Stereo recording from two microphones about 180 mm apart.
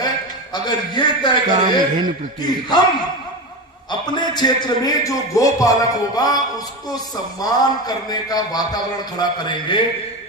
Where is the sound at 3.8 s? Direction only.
25° left (ahead or behind).